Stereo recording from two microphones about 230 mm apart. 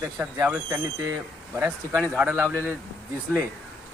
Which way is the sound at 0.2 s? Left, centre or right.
Centre.